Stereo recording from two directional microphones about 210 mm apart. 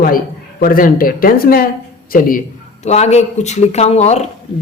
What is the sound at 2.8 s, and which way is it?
A man's voice, 30° left (ahead or behind).